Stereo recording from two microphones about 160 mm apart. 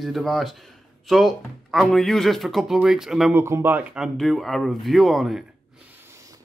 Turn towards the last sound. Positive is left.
turn(degrees=-20)  # may be behind; listen again after turning